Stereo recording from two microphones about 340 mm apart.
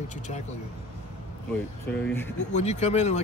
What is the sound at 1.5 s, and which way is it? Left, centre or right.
Speech, centre.